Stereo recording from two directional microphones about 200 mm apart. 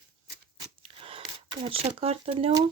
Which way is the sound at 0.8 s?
25° right (ahead or behind).